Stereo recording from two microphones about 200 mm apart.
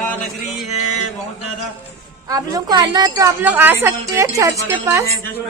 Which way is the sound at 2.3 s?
20° right (ahead or behind).